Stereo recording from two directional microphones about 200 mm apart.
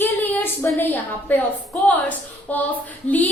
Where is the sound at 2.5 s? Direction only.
10° left (ahead or behind).